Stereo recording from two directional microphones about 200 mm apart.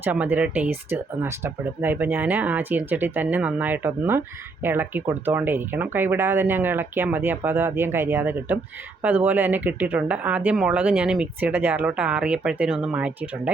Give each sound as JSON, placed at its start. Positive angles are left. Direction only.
{"t": 0.0, "sound": "speech", "side_deg": -10}